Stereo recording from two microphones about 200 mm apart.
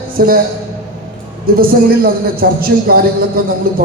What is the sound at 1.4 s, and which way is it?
A woman's voice, 45° right (ahead or behind).